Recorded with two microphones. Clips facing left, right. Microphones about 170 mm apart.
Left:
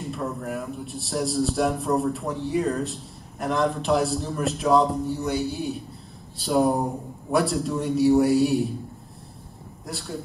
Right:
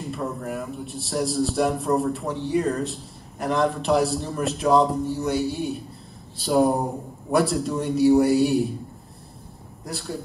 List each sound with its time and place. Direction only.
0.0 s a man's voice: centre (ahead or behind)
9.8 s a man's voice: centre (ahead or behind)